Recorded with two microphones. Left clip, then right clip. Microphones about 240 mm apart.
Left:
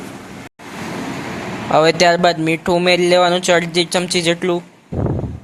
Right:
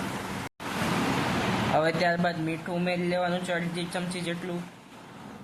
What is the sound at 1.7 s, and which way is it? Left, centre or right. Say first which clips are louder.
Speech: left 15 dB; left.